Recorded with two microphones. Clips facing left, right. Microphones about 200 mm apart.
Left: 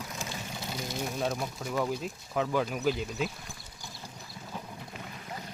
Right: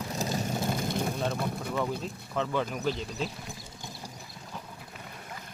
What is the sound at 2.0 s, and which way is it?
Speech, 10° left (ahead or behind).